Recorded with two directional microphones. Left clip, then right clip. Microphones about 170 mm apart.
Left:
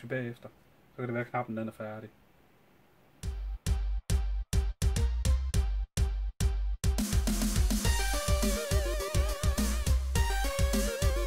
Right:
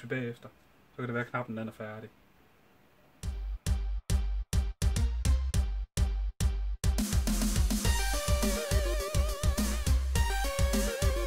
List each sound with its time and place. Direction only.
0.1 s speech: 15° left (ahead or behind)
3.2 s music: centre (ahead or behind)